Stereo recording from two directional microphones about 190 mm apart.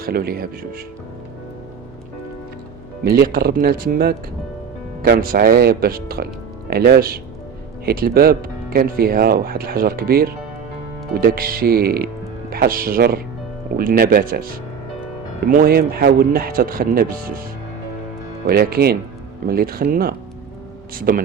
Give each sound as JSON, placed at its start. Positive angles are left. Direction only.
{"t": 0.0, "sound": "speech", "side_deg": -50}
{"t": 3.0, "sound": "speech", "side_deg": -55}
{"t": 18.4, "sound": "speech", "side_deg": -50}